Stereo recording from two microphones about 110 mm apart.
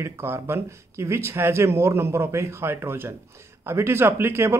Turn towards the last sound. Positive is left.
turn(degrees=-25)  # may be behind; listen again after turning